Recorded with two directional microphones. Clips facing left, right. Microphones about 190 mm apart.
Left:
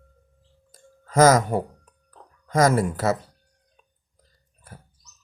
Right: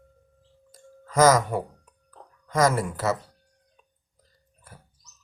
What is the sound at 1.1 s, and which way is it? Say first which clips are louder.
Speech: left 2 dB; 50° left (ahead or behind).